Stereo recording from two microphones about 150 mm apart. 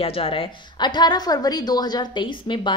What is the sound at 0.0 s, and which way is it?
A woman's voice, 40° left (ahead or behind).